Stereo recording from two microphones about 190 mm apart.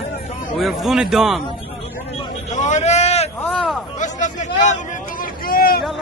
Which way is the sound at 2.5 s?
40° left (ahead or behind).